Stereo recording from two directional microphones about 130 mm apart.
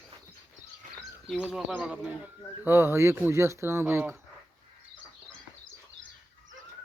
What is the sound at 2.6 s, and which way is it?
Speech, 20° right (ahead or behind).